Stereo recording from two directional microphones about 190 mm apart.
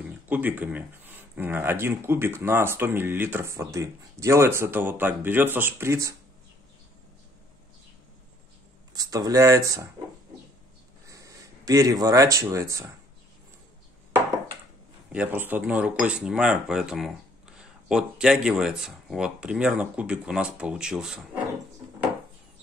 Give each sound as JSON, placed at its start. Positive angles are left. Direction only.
{"t": 0.3, "sound": "speech", "side_deg": -10}
{"t": 8.9, "sound": "speech", "side_deg": -20}
{"t": 11.1, "sound": "speech", "side_deg": -15}
{"t": 15.1, "sound": "speech", "side_deg": -10}